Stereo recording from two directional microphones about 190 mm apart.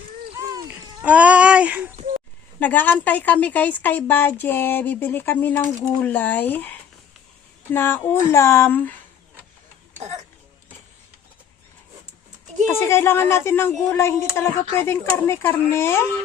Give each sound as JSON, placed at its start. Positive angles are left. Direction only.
{"t": 0.3, "sound": "a sound", "side_deg": -20}
{"t": 1.0, "sound": "speech", "side_deg": -5}
{"t": 2.6, "sound": "a woman's voice", "side_deg": 10}
{"t": 7.7, "sound": "a woman's voice", "side_deg": 10}
{"t": 12.8, "sound": "a woman's voice", "side_deg": 15}